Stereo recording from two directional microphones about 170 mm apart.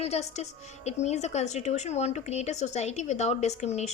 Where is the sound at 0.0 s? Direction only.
40° left (ahead or behind).